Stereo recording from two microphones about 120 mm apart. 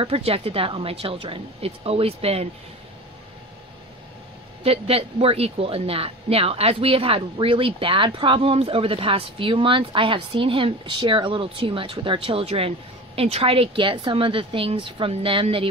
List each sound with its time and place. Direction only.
0.0 s speech: 55° right (ahead or behind)
4.6 s speech: 55° right (ahead or behind)